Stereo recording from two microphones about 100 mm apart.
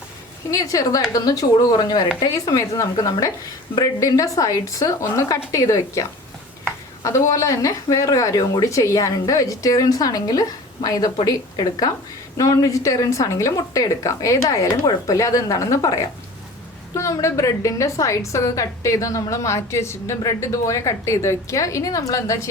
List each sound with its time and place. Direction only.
0.5 s a woman's voice: 35° left (ahead or behind)